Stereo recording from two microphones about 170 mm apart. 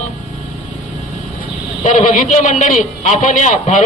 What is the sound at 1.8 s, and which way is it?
A man's voice, 45° left (ahead or behind).